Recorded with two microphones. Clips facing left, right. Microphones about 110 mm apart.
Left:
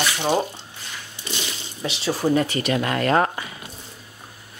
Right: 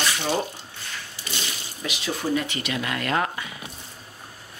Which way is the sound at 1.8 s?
30° left (ahead or behind).